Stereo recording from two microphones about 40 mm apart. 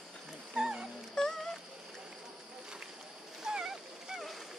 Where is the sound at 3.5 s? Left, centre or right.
Centre.